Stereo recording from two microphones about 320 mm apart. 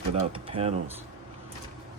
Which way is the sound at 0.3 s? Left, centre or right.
Centre.